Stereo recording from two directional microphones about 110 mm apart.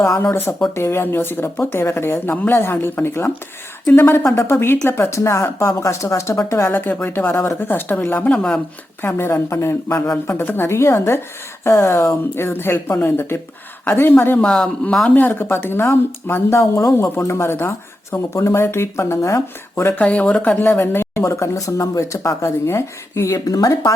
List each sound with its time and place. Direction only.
0.0 s speech: 25° left (ahead or behind)
9.0 s speech: 20° left (ahead or behind)
20.0 s speech: 10° left (ahead or behind); by 23.9 s 35° left (ahead or behind)